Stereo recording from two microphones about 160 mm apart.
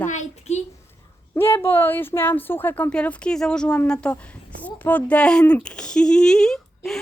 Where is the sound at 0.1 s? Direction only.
45° left (ahead or behind).